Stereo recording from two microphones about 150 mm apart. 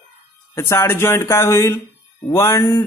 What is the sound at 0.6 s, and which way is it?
A man's voice, 15° left (ahead or behind).